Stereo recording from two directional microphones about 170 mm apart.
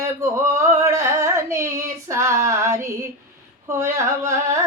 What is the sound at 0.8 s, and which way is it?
Female singing, 15° right (ahead or behind).